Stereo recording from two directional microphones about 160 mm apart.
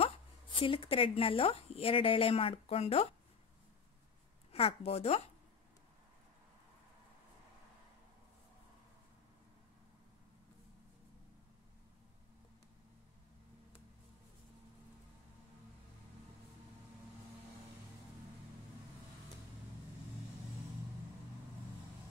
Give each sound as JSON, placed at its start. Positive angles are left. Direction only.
{"t": 0.6, "sound": "speech", "side_deg": 35}
{"t": 4.5, "sound": "speech", "side_deg": 40}